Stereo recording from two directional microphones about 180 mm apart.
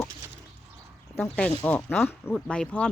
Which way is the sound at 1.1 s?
5° left (ahead or behind).